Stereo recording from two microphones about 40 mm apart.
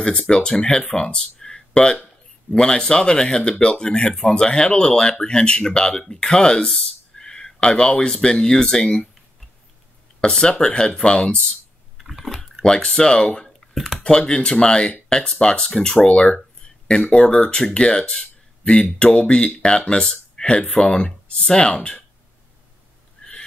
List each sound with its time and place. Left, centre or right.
0.0 s speech: left
0.9 s a sound: left
2.5 s speech: left
10.2 s speech: centre
12.0 s typing: centre
12.6 s speech: centre
13.7 s computer keyboard: centre
14.0 s speech: centre